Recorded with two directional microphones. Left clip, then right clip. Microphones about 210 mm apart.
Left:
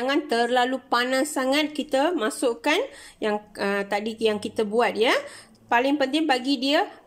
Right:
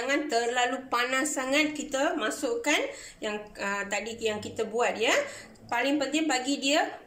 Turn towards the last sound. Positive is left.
turn(degrees=45)  # may be behind; listen again after turning